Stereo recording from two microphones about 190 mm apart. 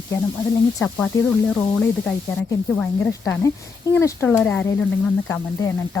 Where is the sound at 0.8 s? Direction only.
10° left (ahead or behind).